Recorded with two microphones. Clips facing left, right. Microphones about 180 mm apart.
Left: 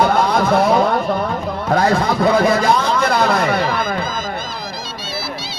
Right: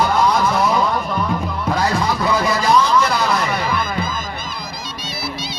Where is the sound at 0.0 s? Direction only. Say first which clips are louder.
Left 1 dB; 55° left (ahead or behind).